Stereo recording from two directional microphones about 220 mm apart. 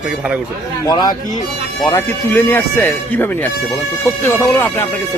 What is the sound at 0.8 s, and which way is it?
Speech, 20° left (ahead or behind).